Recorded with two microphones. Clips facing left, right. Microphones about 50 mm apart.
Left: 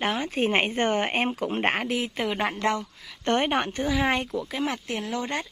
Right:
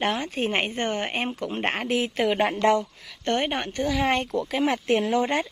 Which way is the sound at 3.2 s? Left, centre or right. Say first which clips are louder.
Left 2 dB; left.